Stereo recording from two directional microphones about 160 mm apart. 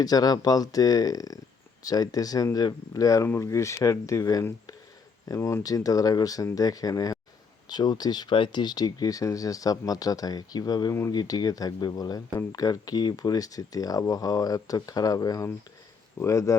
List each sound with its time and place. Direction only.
0.0 s speech: 25° left (ahead or behind)